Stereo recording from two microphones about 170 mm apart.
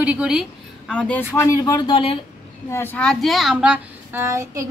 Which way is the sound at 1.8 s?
30° left (ahead or behind).